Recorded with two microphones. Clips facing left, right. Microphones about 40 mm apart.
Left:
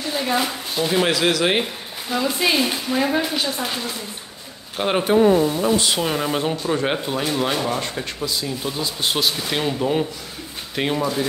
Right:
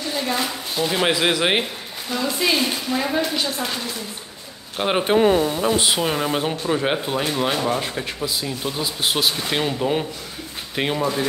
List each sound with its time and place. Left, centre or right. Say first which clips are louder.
0.1 s speech: left 3 dB; centre
1.0 s speech: right 2 dB; centre
1.6 s speech: left 1 dB; centre
4.7 s speech: even; centre
5.7 s speech: even; right
5.9 s speech: even; centre